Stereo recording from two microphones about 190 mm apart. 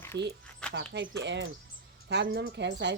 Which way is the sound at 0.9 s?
70° right (ahead or behind).